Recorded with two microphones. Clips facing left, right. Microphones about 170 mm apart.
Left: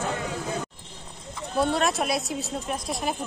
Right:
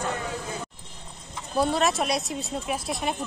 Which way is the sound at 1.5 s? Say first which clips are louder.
Even; centre (ahead or behind).